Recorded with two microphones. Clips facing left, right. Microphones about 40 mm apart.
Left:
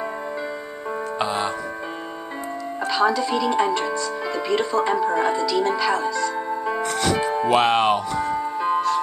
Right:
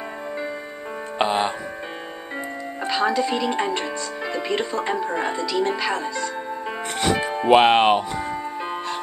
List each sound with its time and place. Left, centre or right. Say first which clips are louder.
1.1 s music: right 4 dB; right
2.8 s speech: left 1 dB; right
6.6 s music: left 1 dB; right